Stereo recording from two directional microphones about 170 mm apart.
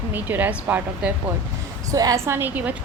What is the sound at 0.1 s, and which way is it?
A woman's voice, 10° right (ahead or behind).